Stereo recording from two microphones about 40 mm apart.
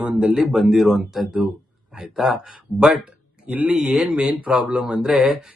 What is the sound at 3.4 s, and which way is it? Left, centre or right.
Speech, right.